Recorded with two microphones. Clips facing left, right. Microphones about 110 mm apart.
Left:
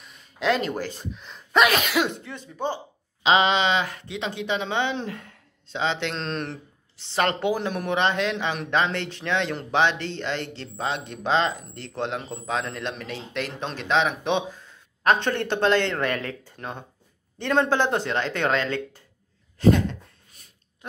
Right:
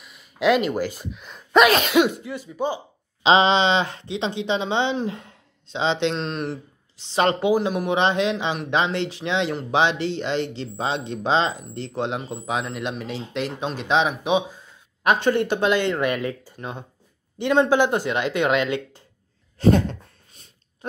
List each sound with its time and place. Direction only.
0.0 s speech: 10° right (ahead or behind)
2.0 s speech: 5° right (ahead or behind)
3.3 s speech: 30° right (ahead or behind)
6.1 s speech: 5° right (ahead or behind)
7.0 s speech: 15° right (ahead or behind)
19.6 s a sound: 35° right (ahead or behind)